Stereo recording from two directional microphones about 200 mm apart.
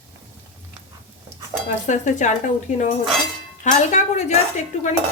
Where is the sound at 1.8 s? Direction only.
35° left (ahead or behind).